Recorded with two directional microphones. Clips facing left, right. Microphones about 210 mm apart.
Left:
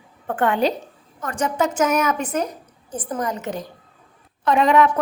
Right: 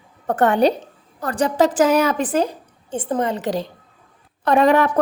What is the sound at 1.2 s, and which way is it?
Speech, 35° right (ahead or behind).